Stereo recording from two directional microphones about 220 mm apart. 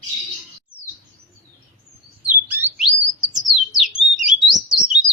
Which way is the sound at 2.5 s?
10° right (ahead or behind).